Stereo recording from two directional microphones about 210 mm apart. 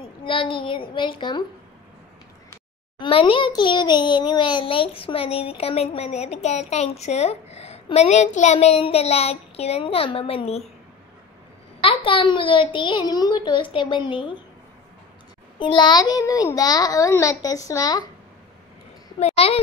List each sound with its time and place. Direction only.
0.2 s a child's voice: 25° left (ahead or behind)
3.0 s a child's voice: 25° left (ahead or behind)
11.8 s a child's voice: 25° left (ahead or behind)
15.6 s a child's voice: 20° left (ahead or behind)
19.1 s a sound: 30° left (ahead or behind)